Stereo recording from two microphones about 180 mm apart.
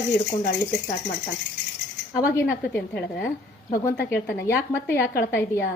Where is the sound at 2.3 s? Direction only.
10° left (ahead or behind).